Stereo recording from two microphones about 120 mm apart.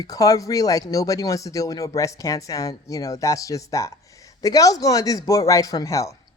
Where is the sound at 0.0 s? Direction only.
30° left (ahead or behind).